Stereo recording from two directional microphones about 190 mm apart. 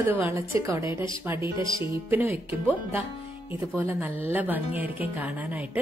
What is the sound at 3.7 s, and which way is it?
Speech, 10° right (ahead or behind).